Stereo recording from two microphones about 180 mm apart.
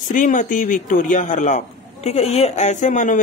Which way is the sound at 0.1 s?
45° left (ahead or behind).